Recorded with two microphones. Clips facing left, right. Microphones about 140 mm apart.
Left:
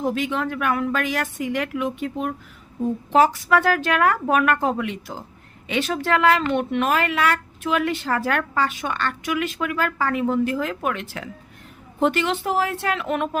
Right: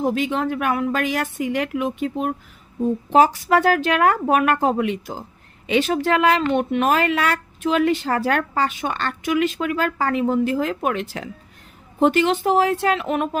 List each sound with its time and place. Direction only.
0.0 s a woman's voice: 25° right (ahead or behind)
12.2 s speech: 30° right (ahead or behind)
12.5 s a woman's voice: 20° right (ahead or behind)